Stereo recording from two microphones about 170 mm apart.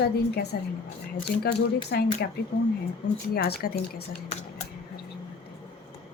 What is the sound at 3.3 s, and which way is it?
Speech, 65° left (ahead or behind).